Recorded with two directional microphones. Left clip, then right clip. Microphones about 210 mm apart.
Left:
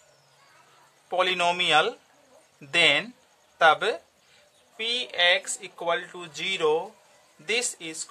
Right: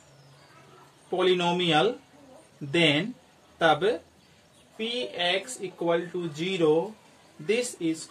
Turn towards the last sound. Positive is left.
turn(degrees=40)  # may be behind; listen again after turning